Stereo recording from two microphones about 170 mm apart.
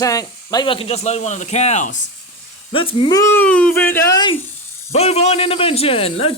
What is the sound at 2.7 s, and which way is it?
Speech, 30° left (ahead or behind).